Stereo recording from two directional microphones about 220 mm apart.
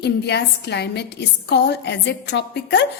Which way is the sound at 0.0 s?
50° left (ahead or behind).